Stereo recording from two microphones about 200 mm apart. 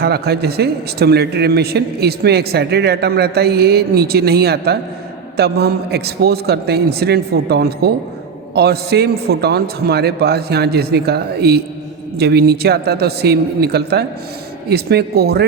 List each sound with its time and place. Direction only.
0.0 s speech: 50° right (ahead or behind)